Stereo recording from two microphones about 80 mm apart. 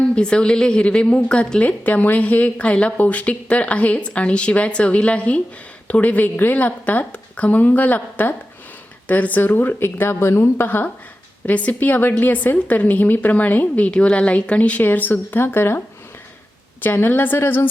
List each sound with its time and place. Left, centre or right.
0.2 s a woman's voice: centre; by 15.8 s left
16.8 s a woman's voice: left